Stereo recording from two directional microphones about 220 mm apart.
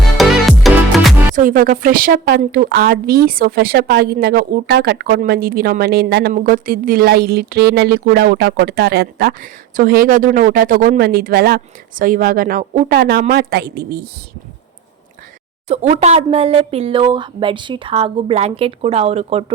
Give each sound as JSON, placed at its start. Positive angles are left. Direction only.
{"t": 0.2, "sound": "music", "side_deg": 0}
{"t": 1.4, "sound": "speech", "side_deg": -40}
{"t": 15.6, "sound": "speech", "side_deg": -30}